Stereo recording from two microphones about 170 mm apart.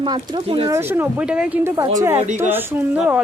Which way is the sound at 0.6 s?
15° right (ahead or behind).